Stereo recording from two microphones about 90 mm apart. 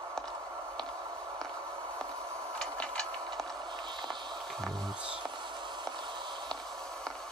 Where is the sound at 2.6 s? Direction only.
10° left (ahead or behind).